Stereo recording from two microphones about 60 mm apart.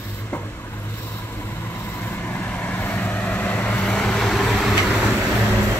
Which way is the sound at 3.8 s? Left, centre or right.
Centre.